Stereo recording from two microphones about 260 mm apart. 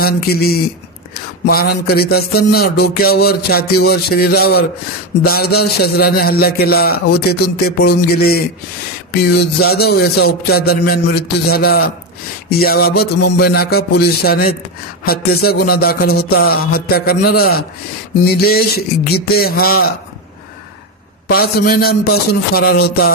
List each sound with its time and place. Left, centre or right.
0.0 s music: left
21.3 s music: left